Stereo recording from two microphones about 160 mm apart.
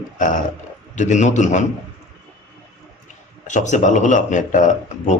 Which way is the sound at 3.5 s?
50° left (ahead or behind).